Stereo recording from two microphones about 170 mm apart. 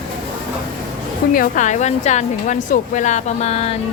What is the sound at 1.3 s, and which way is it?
Speech, 50° left (ahead or behind).